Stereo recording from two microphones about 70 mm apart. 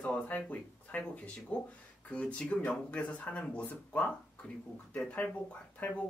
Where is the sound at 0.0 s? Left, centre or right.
Centre.